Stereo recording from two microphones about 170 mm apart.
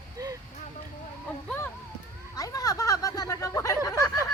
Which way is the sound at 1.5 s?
10° left (ahead or behind).